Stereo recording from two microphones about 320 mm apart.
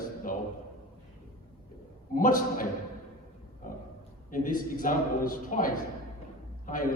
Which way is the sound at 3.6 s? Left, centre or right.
Left.